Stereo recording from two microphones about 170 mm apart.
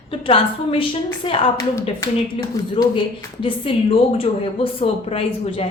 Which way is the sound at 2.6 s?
20° left (ahead or behind).